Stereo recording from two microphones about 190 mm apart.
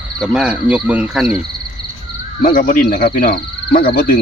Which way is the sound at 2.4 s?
45° left (ahead or behind).